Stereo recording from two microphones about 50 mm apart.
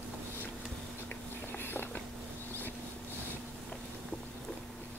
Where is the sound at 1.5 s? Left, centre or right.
Left.